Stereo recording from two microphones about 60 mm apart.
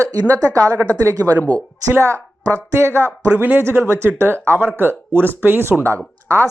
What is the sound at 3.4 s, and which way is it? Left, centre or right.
Speech, right.